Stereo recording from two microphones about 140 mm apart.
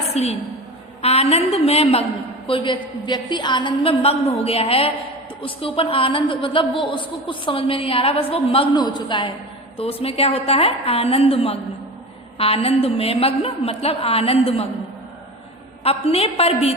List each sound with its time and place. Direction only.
0.1 s a woman's voice: 50° left (ahead or behind)
2.5 s a woman's voice: 35° left (ahead or behind)
15.8 s a woman's voice: 45° left (ahead or behind)